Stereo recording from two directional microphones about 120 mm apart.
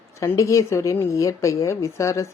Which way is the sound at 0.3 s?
25° left (ahead or behind).